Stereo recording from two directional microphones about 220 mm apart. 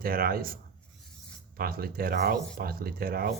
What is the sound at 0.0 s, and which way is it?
Speech, 40° right (ahead or behind).